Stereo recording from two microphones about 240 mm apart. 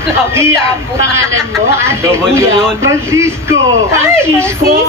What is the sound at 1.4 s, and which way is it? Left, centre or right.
Speech, centre.